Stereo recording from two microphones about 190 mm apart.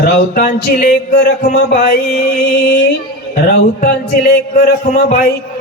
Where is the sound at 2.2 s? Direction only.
55° left (ahead or behind).